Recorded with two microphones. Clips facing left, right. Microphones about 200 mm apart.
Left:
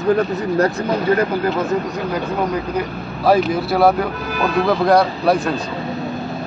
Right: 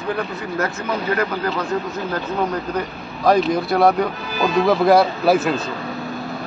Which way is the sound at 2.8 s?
5° left (ahead or behind).